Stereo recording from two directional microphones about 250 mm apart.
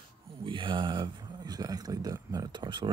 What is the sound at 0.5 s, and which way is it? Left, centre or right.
Speech, centre.